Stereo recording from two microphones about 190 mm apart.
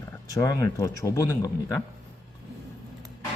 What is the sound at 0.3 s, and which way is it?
Speech, 20° left (ahead or behind).